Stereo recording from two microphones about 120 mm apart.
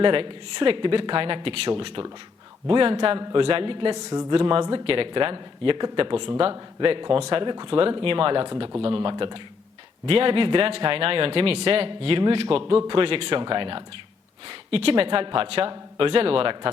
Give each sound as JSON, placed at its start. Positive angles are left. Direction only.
{"t": 0.0, "sound": "a man's voice", "side_deg": -45}
{"t": 3.9, "sound": "speech", "side_deg": -35}
{"t": 4.4, "sound": "a man's voice", "side_deg": -45}
{"t": 14.4, "sound": "a man's voice", "side_deg": -55}